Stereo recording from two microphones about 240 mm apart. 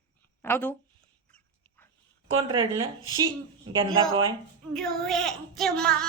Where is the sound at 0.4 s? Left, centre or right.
Centre.